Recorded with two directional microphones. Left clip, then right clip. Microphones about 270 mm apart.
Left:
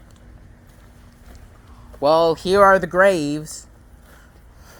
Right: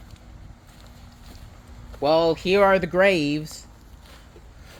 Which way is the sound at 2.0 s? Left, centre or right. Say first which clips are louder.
Left 4 dB; centre.